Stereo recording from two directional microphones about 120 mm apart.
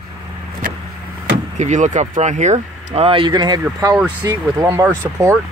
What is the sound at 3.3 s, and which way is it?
Speech, 35° right (ahead or behind).